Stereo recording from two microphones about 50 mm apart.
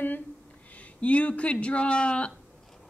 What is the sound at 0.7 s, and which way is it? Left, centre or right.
Speech, left.